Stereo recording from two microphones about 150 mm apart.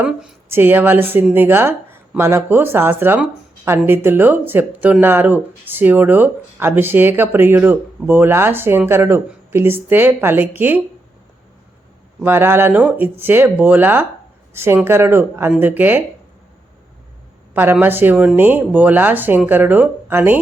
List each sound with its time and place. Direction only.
0.0 s speech: 10° right (ahead or behind)
12.2 s speech: 15° right (ahead or behind)
17.5 s speech: 15° right (ahead or behind)